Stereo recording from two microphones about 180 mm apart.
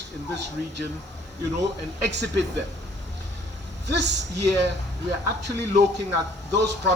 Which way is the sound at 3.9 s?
75° right (ahead or behind).